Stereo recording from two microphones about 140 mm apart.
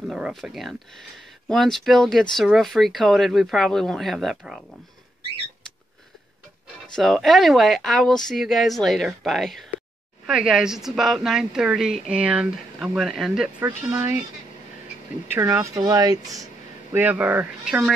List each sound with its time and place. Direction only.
0.0 s speech: 5° right (ahead or behind)
7.0 s speech: centre (ahead or behind)
13.9 s speech: 15° right (ahead or behind)
15.2 s speech: 15° right (ahead or behind)
16.9 s speech: 10° right (ahead or behind)